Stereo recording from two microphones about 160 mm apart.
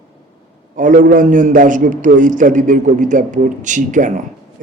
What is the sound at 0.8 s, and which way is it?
A man's voice, 55° right (ahead or behind).